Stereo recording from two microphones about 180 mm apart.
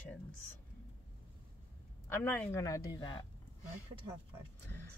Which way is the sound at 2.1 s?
10° left (ahead or behind).